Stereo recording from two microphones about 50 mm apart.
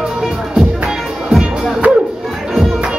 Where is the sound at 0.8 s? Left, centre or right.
Centre.